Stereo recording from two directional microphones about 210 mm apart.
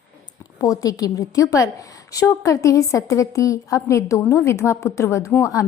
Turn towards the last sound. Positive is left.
turn(degrees=15)  # may be behind; listen again after turning